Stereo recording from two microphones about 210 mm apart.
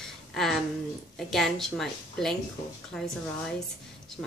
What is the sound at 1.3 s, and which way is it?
Speech, centre (ahead or behind).